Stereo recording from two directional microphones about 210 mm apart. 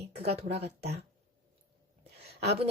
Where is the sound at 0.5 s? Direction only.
50° right (ahead or behind).